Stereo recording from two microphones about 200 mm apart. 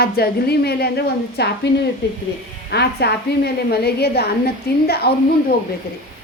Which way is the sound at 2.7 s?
55° left (ahead or behind).